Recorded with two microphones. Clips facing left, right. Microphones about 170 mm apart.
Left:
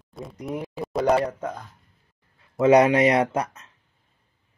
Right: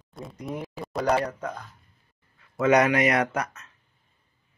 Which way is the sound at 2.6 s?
30° left (ahead or behind).